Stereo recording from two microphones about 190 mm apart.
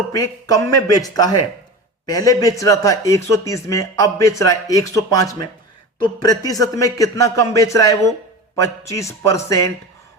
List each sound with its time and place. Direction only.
0.1 s speech: 20° left (ahead or behind)